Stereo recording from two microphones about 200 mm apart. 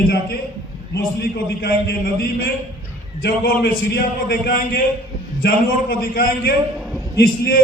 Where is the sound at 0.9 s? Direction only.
50° left (ahead or behind).